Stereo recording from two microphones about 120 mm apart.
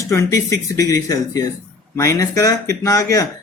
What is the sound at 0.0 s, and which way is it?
Speech, 25° left (ahead or behind).